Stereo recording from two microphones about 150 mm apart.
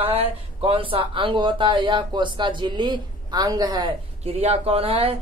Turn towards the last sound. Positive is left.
turn(degrees=-40)  # may be behind; listen again after turning